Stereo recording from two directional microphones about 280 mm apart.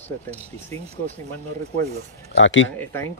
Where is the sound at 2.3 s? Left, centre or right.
Left.